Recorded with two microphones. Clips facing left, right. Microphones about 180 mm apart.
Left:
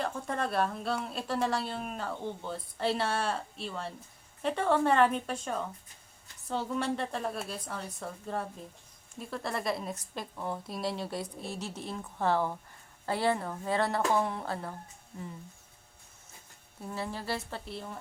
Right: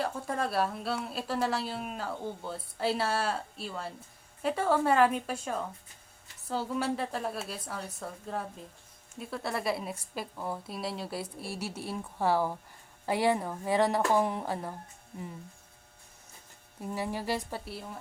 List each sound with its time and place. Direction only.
0.0 s a woman's voice: 5° right (ahead or behind)
16.8 s a woman's voice: 15° right (ahead or behind)